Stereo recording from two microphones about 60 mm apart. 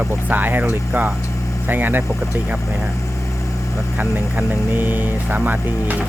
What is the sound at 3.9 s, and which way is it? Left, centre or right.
Speech, right.